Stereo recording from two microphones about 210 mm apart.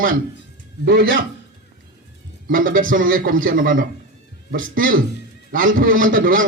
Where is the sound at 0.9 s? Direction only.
55° right (ahead or behind).